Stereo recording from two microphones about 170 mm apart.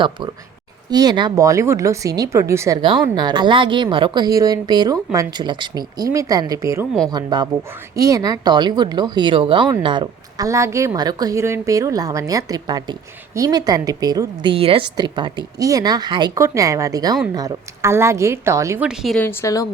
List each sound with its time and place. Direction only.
0.9 s speech: 25° right (ahead or behind)
2.8 s a woman's voice: 25° right (ahead or behind)
18.9 s speech: centre (ahead or behind)
19.2 s a woman's voice: 15° left (ahead or behind)